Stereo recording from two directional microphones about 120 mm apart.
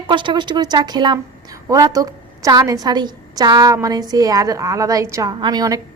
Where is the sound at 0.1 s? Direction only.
40° right (ahead or behind).